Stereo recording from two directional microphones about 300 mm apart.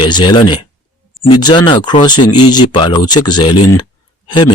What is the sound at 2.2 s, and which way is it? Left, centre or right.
Speech, left.